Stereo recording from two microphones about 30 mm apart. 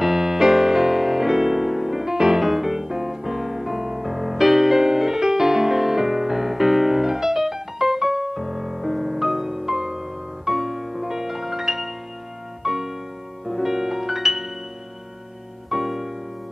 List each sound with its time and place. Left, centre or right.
0.0 s music: centre
2.4 s music: centre
12.6 s piano: centre
13.5 s music: centre
15.7 s music: centre